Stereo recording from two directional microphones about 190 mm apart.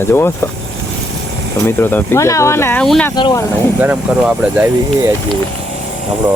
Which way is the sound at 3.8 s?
10° right (ahead or behind).